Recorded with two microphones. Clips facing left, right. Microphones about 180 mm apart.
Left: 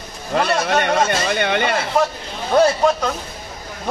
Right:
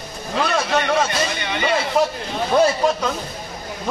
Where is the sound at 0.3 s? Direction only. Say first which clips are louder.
Left 2 dB; 55° left (ahead or behind).